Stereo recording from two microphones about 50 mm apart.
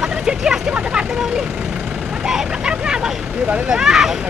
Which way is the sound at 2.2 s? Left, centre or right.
Centre.